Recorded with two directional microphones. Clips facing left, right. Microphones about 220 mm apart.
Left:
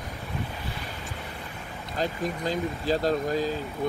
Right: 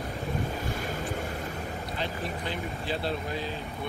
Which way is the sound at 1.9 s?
40° left (ahead or behind).